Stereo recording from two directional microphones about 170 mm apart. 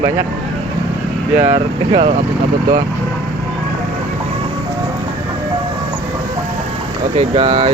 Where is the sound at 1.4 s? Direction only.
40° right (ahead or behind).